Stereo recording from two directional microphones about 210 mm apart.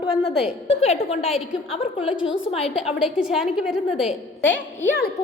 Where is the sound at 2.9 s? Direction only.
Centre (ahead or behind).